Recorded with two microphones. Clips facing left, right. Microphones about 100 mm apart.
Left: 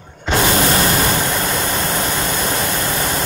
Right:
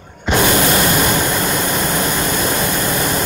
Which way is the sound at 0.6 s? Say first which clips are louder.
Right 1 dB; 25° left (ahead or behind).